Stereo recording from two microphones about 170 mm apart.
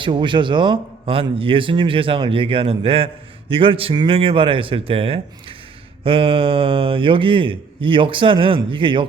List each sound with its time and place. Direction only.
0.0 s a man's voice: 30° right (ahead or behind)